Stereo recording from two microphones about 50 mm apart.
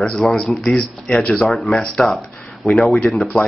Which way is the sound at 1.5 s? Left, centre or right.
Centre.